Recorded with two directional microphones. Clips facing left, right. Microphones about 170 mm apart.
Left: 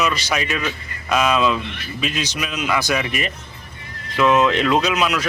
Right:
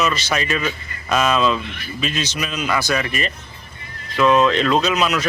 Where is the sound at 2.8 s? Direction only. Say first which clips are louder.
Even; 15° left (ahead or behind).